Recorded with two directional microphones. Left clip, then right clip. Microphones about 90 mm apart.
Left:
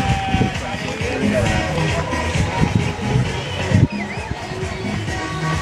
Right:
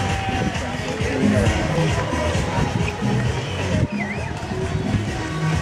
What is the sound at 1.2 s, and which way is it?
Music, 10° left (ahead or behind).